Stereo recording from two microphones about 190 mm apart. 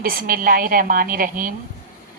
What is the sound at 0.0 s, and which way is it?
Speech, 45° right (ahead or behind).